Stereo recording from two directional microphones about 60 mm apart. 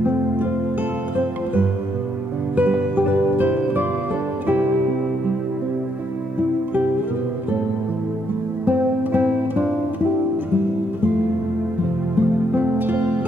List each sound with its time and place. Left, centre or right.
2.5 s music: right
8.6 s music: right
12.2 s music: right